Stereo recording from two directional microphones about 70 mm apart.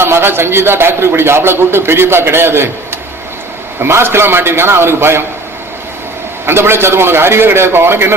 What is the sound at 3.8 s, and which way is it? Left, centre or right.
Speech, right.